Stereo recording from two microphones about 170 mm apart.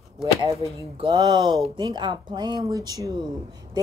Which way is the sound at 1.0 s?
25° right (ahead or behind).